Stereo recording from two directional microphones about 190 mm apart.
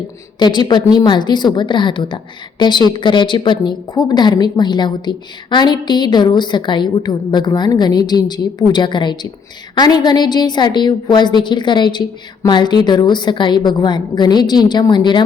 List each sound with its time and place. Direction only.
0.3 s a woman's voice: 25° left (ahead or behind)